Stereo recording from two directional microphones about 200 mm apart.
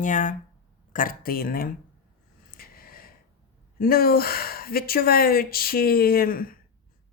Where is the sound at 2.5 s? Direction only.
45° left (ahead or behind).